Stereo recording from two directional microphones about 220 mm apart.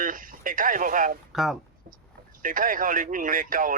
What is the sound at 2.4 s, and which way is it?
Speech, 40° right (ahead or behind).